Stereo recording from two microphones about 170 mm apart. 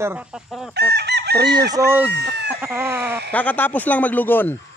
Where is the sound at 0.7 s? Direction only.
75° right (ahead or behind).